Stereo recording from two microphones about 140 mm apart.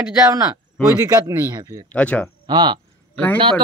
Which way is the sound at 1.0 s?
25° right (ahead or behind).